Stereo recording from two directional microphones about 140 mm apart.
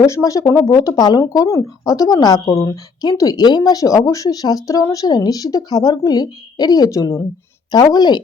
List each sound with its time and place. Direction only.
0.0 s speech: 25° left (ahead or behind)